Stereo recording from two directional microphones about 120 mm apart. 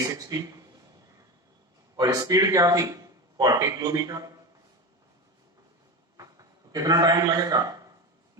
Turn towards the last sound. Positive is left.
turn(degrees=-30)  # may be behind; listen again after turning